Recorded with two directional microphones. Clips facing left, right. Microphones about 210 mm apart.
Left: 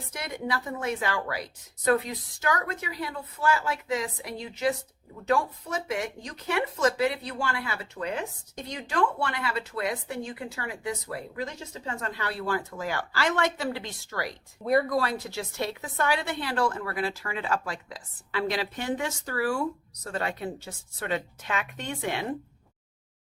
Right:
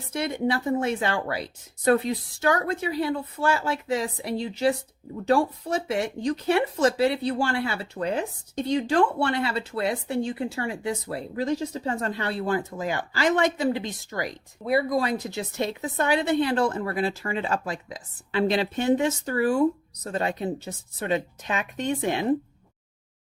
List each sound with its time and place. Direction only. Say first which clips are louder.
0.1 s speech: right 7 dB; 25° right (ahead or behind)
14.6 s speech: right 1 dB; 5° right (ahead or behind)